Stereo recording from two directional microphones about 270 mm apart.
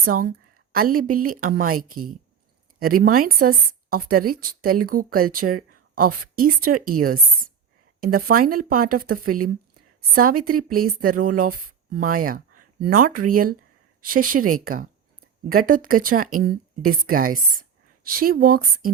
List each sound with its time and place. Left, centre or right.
0.0 s a woman's voice: right
8.0 s a woman's voice: right
9.2 s speech: right
10.2 s a woman's voice: right